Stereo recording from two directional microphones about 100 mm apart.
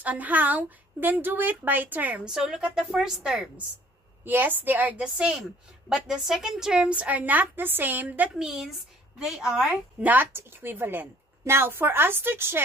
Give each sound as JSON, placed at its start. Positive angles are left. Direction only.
{"t": 0.0, "sound": "a woman's voice", "side_deg": -15}
{"t": 4.2, "sound": "a woman's voice", "side_deg": -20}
{"t": 5.1, "sound": "a woman's voice", "side_deg": -5}
{"t": 8.4, "sound": "a woman's voice", "side_deg": -5}